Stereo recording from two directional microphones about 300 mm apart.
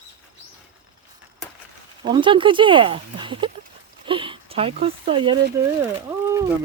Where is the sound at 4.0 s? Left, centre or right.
Centre.